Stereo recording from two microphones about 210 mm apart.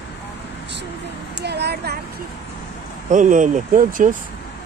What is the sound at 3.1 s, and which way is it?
Speech, 35° right (ahead or behind).